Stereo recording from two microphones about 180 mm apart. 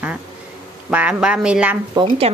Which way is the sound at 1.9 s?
30° right (ahead or behind).